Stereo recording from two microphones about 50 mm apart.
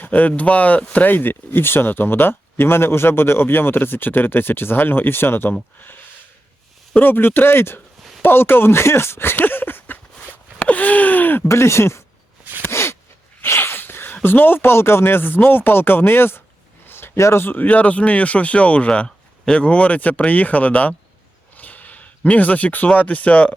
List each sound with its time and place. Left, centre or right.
0.0 s speech: left
0.9 s speech: left
6.9 s speech: left
10.2 s a sound: left
11.4 s speech: left
12.6 s gasp: left
13.4 s speech: left
16.8 s a sound: left
17.2 s speech: left
17.4 s speech: left
21.5 s a sound: left
23.0 s speech: left